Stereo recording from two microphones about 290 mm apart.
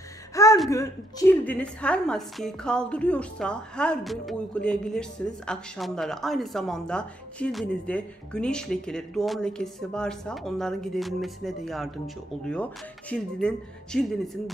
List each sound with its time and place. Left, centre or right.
0.3 s gasp: centre
0.7 s a woman's voice: centre
13.1 s a woman's voice: centre